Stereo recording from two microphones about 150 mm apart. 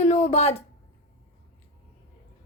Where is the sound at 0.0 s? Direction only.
50° left (ahead or behind).